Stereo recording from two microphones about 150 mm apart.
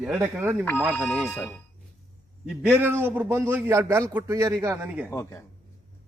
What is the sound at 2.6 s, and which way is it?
A man's voice, 10° right (ahead or behind).